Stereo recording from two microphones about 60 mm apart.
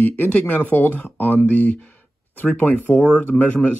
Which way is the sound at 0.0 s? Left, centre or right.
Left.